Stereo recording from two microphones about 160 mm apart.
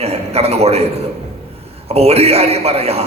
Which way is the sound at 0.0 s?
40° right (ahead or behind).